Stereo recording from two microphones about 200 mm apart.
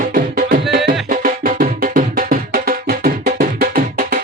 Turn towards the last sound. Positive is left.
turn(degrees=-50)  # may be behind; listen again after turning